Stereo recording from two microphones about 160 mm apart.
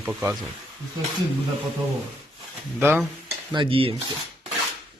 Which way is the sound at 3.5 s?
35° right (ahead or behind).